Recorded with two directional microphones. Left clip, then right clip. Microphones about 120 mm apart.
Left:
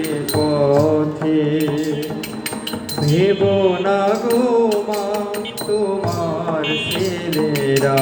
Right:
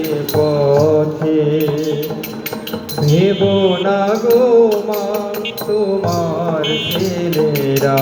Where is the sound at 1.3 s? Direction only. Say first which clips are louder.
Right 2 dB; 30° left (ahead or behind).